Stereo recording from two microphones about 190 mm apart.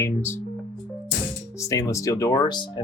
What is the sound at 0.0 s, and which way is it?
Speech, 10° left (ahead or behind).